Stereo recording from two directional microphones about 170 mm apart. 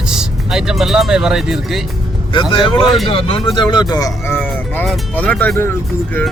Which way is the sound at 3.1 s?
30° left (ahead or behind).